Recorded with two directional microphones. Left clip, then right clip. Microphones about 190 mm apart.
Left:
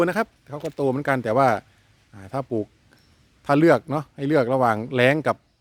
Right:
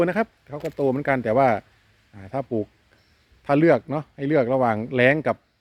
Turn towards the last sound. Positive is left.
turn(degrees=20)  # may be behind; listen again after turning